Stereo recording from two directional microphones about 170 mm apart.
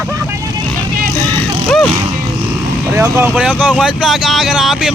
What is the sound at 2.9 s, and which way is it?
Speech, 15° right (ahead or behind).